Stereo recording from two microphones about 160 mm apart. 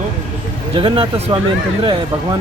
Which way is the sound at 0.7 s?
35° right (ahead or behind).